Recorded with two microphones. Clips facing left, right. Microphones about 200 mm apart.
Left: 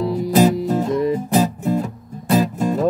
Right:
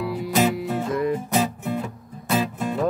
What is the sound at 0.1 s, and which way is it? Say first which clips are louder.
Music: left 6 dB; 40° left (ahead or behind).